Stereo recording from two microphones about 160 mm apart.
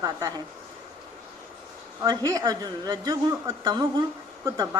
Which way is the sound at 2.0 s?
25° right (ahead or behind).